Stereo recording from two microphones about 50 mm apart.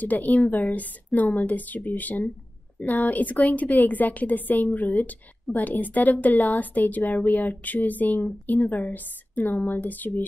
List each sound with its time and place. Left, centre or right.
0.0 s a woman's voice: left